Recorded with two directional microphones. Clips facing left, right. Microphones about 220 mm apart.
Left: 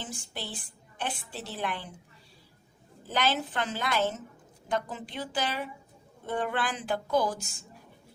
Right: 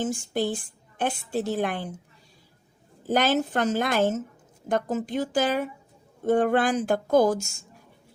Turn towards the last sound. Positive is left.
turn(degrees=-45)  # may be behind; listen again after turning